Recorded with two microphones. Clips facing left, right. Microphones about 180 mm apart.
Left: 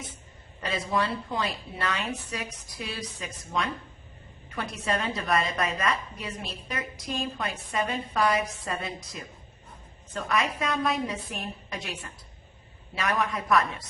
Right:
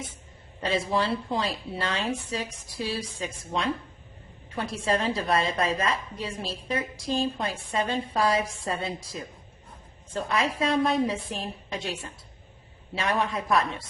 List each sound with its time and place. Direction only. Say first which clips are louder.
0.6 s a woman's voice: right 2 dB; 30° right (ahead or behind)